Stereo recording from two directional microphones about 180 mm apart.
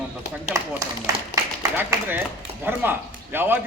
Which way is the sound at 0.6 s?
15° right (ahead or behind).